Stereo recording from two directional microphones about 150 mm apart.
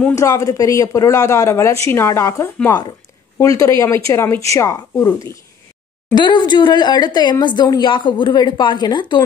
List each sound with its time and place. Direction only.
0.1 s a woman's voice: 20° left (ahead or behind)
6.1 s speech: 30° left (ahead or behind)